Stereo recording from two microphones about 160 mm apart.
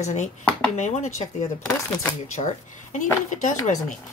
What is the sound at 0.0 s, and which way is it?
A woman's voice, 45° left (ahead or behind).